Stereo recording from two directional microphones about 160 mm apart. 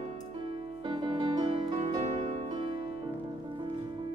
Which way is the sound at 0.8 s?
30° right (ahead or behind).